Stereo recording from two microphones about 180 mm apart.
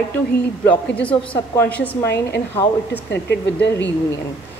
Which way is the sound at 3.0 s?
75° left (ahead or behind).